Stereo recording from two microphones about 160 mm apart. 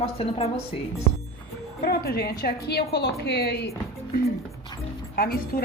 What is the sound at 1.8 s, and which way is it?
A woman's voice, 70° left (ahead or behind).